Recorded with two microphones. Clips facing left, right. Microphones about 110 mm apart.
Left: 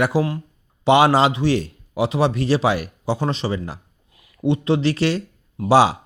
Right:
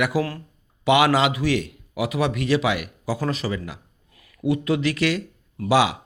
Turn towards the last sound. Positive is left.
turn(degrees=35)  # may be behind; listen again after turning